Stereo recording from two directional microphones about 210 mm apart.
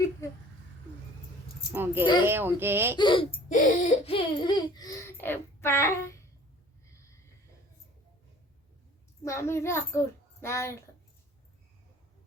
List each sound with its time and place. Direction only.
1.7 s speech: 10° right (ahead or behind)
3.0 s speech: 25° left (ahead or behind)
3.5 s speech: 40° left (ahead or behind); by 6.1 s 10° left (ahead or behind)
9.2 s a child's voice: 15° left (ahead or behind)